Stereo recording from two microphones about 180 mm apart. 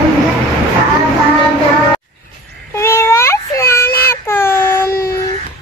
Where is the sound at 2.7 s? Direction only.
15° left (ahead or behind).